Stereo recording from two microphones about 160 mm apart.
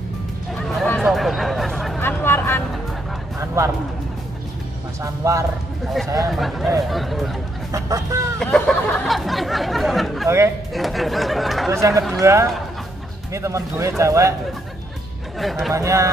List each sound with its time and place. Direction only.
1.0 s a sound: centre (ahead or behind)
2.0 s a sound: 15° left (ahead or behind)
3.3 s music: 20° right (ahead or behind)
5.0 s speech: 20° right (ahead or behind)
6.3 s speech: centre (ahead or behind)
7.7 s speech: 20° right (ahead or behind)
8.4 s a sound: 5° left (ahead or behind)
10.2 s speech: 15° right (ahead or behind)
10.7 s speech: centre (ahead or behind)
11.7 s speech: 20° right (ahead or behind)
15.3 s speech: centre (ahead or behind)
15.7 s speech: 20° right (ahead or behind)